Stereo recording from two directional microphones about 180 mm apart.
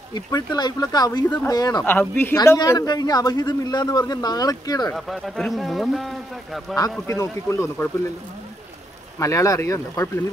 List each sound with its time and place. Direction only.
0.1 s a man's voice: 20° left (ahead or behind)
4.9 s a man's voice: centre (ahead or behind)
7.1 s speech: 15° left (ahead or behind)
9.2 s speech: 15° left (ahead or behind)